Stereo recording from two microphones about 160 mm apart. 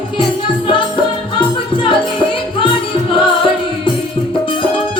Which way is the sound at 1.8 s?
30° left (ahead or behind).